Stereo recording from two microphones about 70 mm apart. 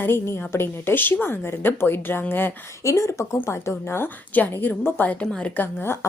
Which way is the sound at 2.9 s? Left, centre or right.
Left.